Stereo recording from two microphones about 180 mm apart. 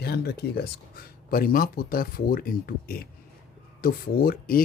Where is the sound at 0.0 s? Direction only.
60° left (ahead or behind).